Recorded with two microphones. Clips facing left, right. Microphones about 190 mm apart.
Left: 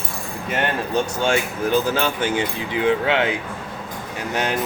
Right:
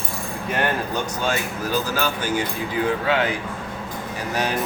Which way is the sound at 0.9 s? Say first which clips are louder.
Left 4 dB; 25° left (ahead or behind).